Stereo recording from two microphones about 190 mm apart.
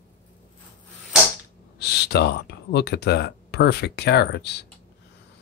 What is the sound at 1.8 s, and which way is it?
Speech, 60° left (ahead or behind).